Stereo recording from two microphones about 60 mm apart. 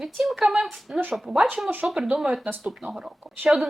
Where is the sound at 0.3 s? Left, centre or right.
Centre.